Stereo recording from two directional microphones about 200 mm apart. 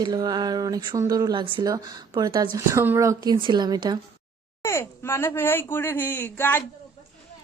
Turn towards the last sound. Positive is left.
turn(degrees=10)  # may be behind; listen again after turning